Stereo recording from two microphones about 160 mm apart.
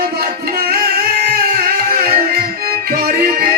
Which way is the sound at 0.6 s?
65° right (ahead or behind).